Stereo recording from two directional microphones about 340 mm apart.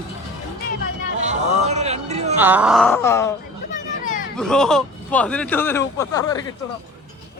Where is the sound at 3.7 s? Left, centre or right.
Left.